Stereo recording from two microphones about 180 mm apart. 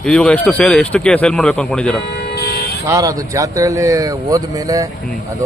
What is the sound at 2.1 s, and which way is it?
Vehicle, 65° left (ahead or behind).